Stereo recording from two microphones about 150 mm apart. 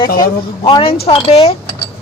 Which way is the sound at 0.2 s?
35° left (ahead or behind).